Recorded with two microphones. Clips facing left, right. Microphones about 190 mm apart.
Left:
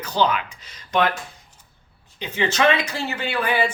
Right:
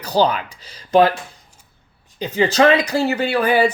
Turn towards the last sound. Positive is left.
turn(degrees=-40)  # may be behind; listen again after turning